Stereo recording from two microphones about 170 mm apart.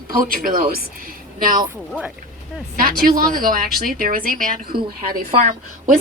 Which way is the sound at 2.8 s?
55° right (ahead or behind).